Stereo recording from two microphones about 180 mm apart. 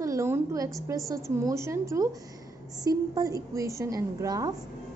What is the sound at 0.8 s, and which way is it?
A woman's voice, 20° right (ahead or behind).